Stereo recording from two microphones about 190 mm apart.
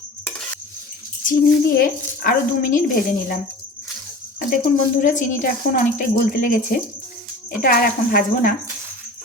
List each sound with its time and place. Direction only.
1.7 s a woman's voice: 50° left (ahead or behind)
4.4 s a woman's voice: 45° left (ahead or behind)